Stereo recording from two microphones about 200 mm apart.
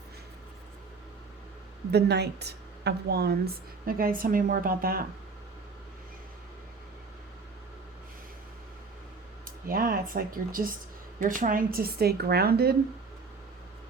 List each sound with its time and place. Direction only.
1.9 s a woman's voice: 55° right (ahead or behind)
9.6 s a woman's voice: 45° right (ahead or behind)